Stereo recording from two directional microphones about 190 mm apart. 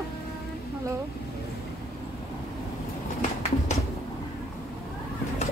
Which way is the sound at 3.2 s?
40° left (ahead or behind).